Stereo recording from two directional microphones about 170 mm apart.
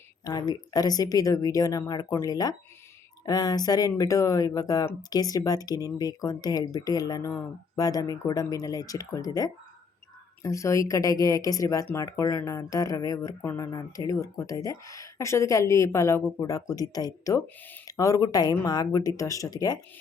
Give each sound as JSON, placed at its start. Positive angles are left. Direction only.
{"t": 0.3, "sound": "speech", "side_deg": 20}